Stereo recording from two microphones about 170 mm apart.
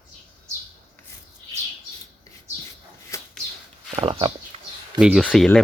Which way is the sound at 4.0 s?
30° right (ahead or behind).